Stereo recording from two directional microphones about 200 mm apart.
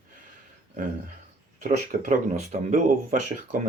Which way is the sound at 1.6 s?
40° right (ahead or behind).